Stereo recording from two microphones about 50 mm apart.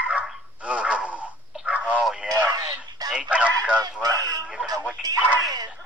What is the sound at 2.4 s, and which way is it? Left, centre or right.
Fowl, right.